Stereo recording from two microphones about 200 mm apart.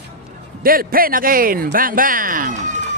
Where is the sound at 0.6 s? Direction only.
45° right (ahead or behind).